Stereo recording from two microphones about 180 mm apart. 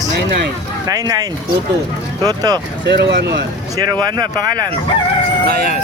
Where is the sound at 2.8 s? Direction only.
70° right (ahead or behind).